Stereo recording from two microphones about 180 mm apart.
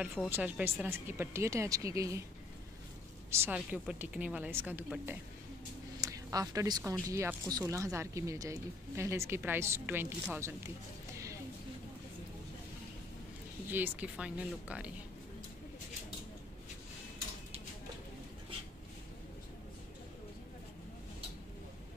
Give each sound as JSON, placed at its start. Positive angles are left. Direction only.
{"t": 0.0, "sound": "speech", "side_deg": -5}
{"t": 3.3, "sound": "speech", "side_deg": -10}
{"t": 5.9, "sound": "speech", "side_deg": -20}
{"t": 13.7, "sound": "speech", "side_deg": -10}